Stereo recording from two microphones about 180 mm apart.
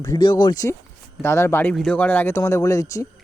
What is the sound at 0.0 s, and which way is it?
Speech, 20° left (ahead or behind).